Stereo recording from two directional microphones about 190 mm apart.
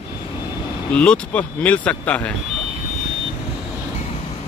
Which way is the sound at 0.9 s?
5° left (ahead or behind).